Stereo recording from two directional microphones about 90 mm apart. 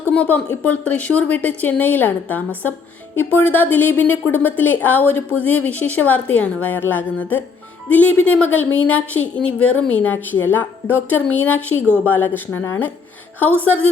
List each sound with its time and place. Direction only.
0.1 s a woman's voice: 15° left (ahead or behind)